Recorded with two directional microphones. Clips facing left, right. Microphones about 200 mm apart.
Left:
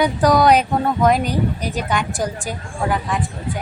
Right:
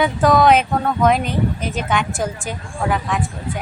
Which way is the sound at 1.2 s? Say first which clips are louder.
Even; 40° left (ahead or behind).